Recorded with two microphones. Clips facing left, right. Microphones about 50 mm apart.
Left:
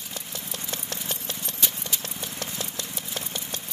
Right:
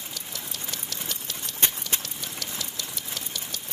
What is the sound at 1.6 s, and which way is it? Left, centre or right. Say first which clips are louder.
Clip-clop: right 2 dB; right.